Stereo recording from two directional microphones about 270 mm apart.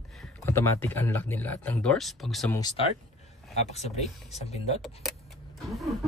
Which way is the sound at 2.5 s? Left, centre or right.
Centre.